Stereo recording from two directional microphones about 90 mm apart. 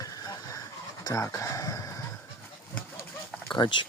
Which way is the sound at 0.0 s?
45° left (ahead or behind).